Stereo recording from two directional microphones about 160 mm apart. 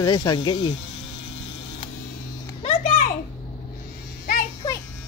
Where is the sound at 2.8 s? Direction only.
55° left (ahead or behind).